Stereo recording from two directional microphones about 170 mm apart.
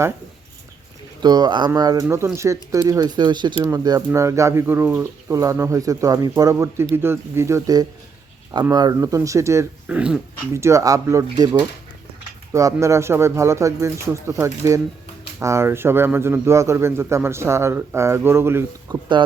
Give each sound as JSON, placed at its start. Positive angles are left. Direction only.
{"t": 1.2, "sound": "a man's voice", "side_deg": -25}
{"t": 10.5, "sound": "speech", "side_deg": -15}
{"t": 12.5, "sound": "a man's voice", "side_deg": -15}